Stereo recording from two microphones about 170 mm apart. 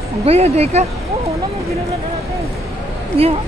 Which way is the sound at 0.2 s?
35° right (ahead or behind).